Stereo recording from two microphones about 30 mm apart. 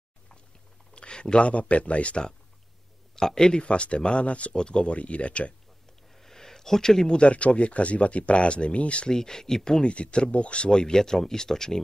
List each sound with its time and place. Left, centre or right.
0.9 s a sound: left
1.4 s speech: left
3.2 s speech: left
3.6 s speech: left
4.6 s speech: left
4.8 s speech: left
6.1 s a sound: centre
7.1 s speech: left
9.1 s speech: centre
9.8 s speech: left
10.7 s speech: left